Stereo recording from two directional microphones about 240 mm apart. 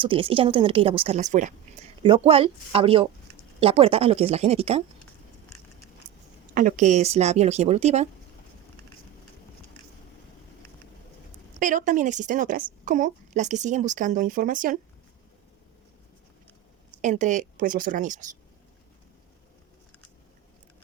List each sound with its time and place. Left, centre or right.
0.0 s speech: right
6.5 s speech: right
11.6 s a woman's voice: right
17.0 s a woman's voice: right